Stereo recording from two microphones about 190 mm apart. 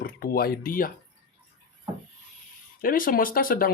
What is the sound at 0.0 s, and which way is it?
Speech, 50° left (ahead or behind).